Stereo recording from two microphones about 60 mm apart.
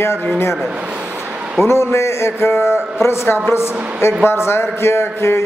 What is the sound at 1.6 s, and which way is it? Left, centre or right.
A man's voice, left.